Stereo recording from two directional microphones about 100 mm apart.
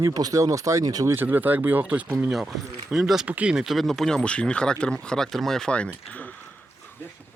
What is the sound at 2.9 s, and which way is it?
Speech, 5° right (ahead or behind).